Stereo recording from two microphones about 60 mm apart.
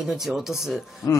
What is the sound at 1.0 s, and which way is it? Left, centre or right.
Speech, left.